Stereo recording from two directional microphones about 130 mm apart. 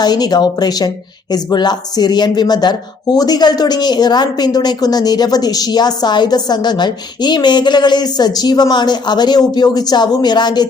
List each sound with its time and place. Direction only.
0.0 s a woman's voice: 30° left (ahead or behind)